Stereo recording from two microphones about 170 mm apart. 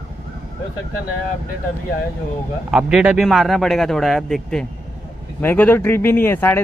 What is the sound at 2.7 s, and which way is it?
A man's voice, 5° right (ahead or behind).